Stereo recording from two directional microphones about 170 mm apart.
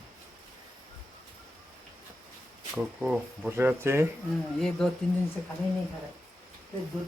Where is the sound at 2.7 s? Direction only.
5° right (ahead or behind).